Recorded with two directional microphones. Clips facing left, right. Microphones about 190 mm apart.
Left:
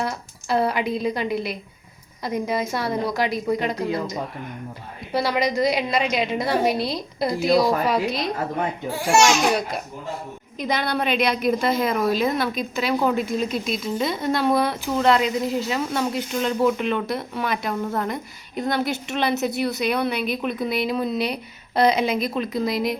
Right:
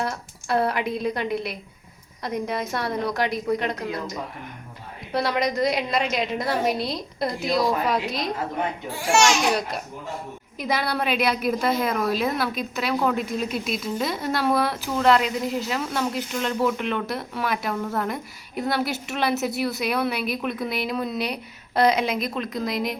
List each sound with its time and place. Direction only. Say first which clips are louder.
0.0 s a woman's voice: left 1 dB; centre (ahead or behind)
5.1 s a woman's voice: left 2 dB; centre (ahead or behind)